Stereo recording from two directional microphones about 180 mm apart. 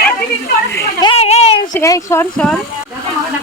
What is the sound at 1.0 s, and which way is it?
Speech, 30° left (ahead or behind).